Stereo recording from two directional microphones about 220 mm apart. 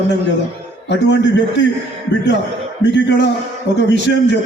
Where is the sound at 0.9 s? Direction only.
55° left (ahead or behind).